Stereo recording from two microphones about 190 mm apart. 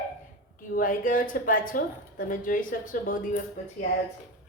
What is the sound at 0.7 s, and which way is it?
Speech, 45° left (ahead or behind).